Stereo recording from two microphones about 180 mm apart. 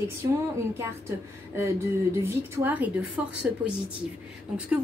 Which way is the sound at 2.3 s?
15° right (ahead or behind).